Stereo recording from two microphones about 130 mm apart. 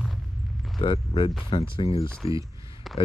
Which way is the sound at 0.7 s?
40° left (ahead or behind).